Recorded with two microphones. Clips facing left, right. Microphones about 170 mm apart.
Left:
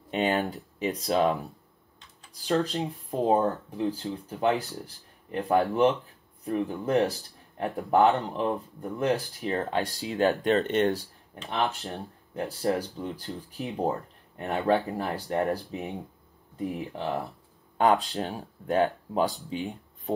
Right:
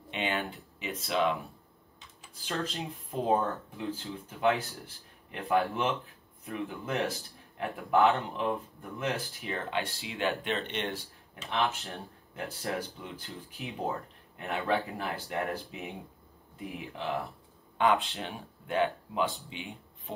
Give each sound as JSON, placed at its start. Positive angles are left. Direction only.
{"t": 0.1, "sound": "speech", "side_deg": 40}